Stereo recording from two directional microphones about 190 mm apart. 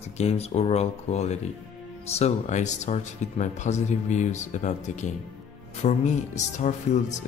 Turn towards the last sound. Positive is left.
turn(degrees=40)  # may be behind; listen again after turning